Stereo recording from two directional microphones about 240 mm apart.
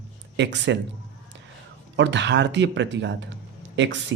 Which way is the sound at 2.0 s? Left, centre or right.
Right.